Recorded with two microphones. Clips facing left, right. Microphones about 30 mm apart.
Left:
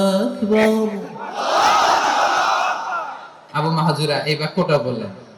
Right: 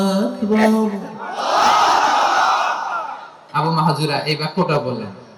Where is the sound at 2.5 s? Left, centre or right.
Centre.